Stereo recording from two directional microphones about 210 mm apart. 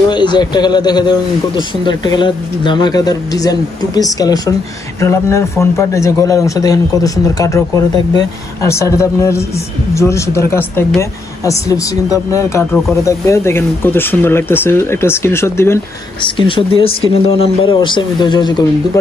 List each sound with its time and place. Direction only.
0.1 s a man's voice: 20° left (ahead or behind)
16.3 s speech: 25° left (ahead or behind)